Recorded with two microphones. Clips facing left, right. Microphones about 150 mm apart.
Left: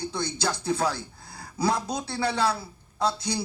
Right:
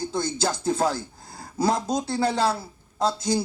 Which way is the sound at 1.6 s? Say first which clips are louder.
Right 3 dB; 25° right (ahead or behind).